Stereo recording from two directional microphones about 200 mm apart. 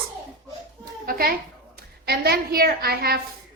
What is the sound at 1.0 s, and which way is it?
A child's voice, 45° right (ahead or behind).